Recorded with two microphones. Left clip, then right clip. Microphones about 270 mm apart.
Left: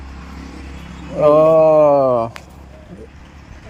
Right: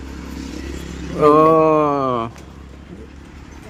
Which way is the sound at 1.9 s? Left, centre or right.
Right.